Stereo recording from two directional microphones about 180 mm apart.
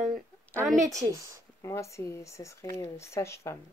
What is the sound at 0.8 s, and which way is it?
Speech, 20° right (ahead or behind).